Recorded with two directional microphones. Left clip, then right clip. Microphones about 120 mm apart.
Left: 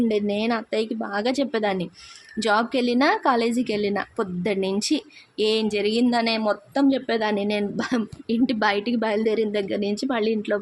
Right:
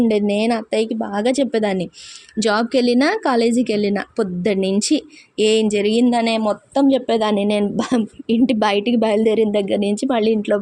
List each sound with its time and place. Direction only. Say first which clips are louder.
0.1 s a woman's voice: right 5 dB; 20° right (ahead or behind)